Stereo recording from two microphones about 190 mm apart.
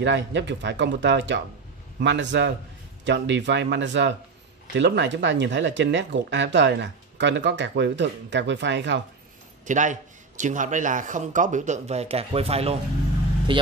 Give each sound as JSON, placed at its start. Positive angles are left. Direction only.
{"t": 0.0, "sound": "speech", "side_deg": -65}
{"t": 9.7, "sound": "a man's voice", "side_deg": -40}